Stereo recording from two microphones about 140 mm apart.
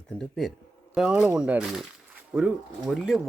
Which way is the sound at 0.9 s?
5° right (ahead or behind).